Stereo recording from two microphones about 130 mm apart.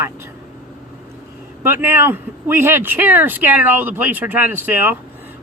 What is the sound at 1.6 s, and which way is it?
A man's voice, 20° right (ahead or behind).